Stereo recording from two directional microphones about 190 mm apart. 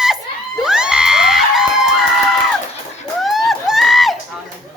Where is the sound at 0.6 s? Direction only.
5° right (ahead or behind).